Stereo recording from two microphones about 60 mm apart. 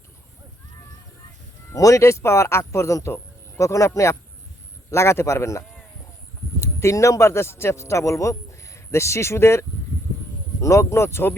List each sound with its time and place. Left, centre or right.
1.7 s a man's voice: left